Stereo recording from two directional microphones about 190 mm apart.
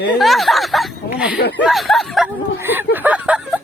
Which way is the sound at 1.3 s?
60° left (ahead or behind).